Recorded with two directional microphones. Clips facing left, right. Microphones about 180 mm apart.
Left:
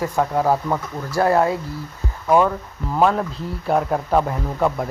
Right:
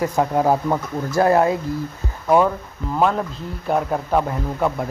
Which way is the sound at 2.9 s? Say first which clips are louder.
Left 1 dB; centre (ahead or behind).